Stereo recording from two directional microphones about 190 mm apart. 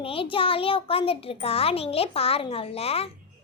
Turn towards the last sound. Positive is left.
turn(degrees=30)  # may be behind; listen again after turning